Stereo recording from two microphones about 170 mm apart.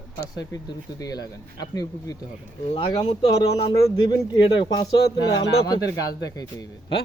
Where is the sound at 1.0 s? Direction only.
20° left (ahead or behind).